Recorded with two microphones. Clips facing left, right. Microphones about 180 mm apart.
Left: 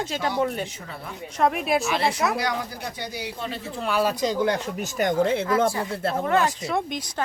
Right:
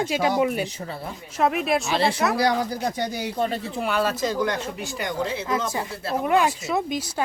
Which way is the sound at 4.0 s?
15° left (ahead or behind).